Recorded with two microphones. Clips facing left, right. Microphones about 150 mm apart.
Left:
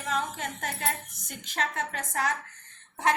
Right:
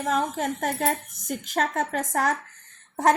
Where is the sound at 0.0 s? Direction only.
45° right (ahead or behind).